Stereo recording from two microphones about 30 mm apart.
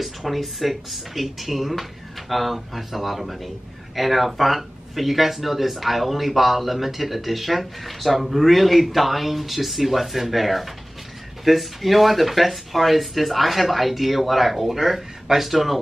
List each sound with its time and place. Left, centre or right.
0.0 s speech: centre